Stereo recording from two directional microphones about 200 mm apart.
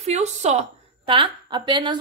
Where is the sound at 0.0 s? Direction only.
35° right (ahead or behind).